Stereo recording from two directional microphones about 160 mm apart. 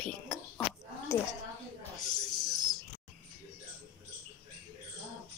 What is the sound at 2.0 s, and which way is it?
Snake, 25° left (ahead or behind).